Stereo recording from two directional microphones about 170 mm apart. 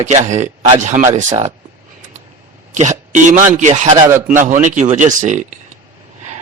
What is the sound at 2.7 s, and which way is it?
A man's voice, 45° right (ahead or behind).